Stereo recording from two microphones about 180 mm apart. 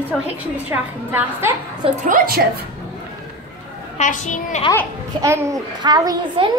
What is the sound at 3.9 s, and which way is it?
Speech, 45° left (ahead or behind).